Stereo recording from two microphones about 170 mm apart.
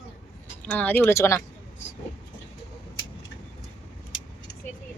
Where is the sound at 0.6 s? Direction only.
10° left (ahead or behind).